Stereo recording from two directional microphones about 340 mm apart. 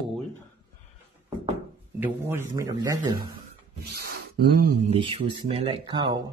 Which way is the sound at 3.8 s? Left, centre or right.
Right.